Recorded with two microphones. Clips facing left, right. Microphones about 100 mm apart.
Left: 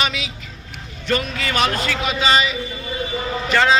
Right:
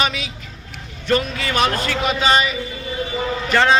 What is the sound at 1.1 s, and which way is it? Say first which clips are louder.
A man's voice: right 2 dB; 30° right (ahead or behind).